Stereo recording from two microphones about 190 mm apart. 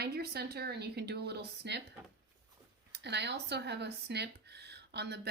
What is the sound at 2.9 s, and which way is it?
Speech, 65° right (ahead or behind).